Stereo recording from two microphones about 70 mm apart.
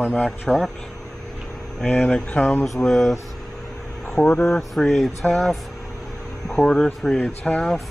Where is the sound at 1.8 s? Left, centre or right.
Centre.